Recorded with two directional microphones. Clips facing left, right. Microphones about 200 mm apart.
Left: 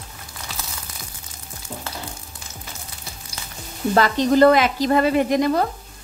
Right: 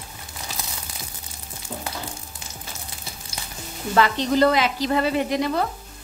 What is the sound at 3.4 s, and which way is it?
Sizzle, 15° right (ahead or behind).